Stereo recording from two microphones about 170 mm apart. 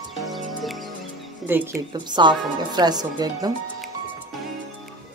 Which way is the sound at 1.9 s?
25° right (ahead or behind).